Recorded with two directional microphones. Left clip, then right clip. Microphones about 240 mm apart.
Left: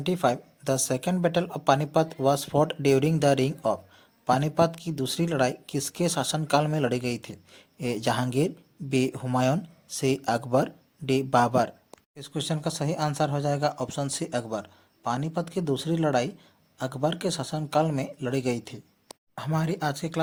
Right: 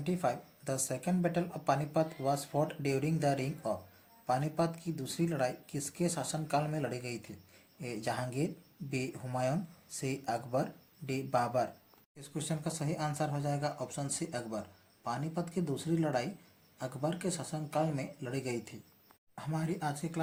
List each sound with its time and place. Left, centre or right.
0.0 s speech: left